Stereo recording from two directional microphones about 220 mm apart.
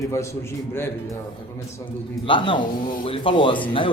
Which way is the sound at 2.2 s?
25° left (ahead or behind).